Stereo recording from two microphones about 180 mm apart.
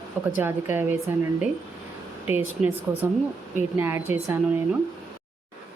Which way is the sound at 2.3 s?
10° right (ahead or behind).